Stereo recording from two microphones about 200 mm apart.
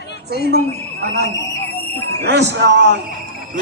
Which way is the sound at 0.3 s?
50° right (ahead or behind).